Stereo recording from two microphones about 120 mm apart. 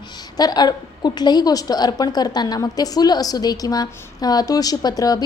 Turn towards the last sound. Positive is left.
turn(degrees=30)  # may be behind; listen again after turning